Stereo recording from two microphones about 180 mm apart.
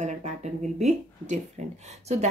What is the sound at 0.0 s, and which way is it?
Speech, 40° right (ahead or behind).